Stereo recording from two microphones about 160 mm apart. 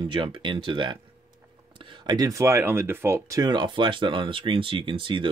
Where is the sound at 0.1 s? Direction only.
30° right (ahead or behind).